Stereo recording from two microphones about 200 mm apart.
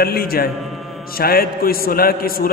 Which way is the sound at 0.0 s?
50° left (ahead or behind).